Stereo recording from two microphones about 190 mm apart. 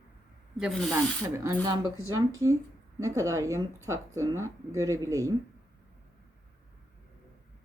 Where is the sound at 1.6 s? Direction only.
15° right (ahead or behind).